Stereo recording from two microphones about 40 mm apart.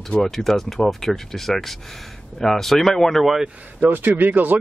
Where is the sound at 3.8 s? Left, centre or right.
Right.